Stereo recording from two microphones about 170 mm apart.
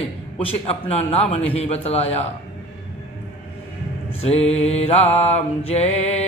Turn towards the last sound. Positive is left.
turn(degrees=40)  # may be behind; listen again after turning